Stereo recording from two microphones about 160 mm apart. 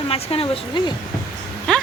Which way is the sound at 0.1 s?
35° left (ahead or behind).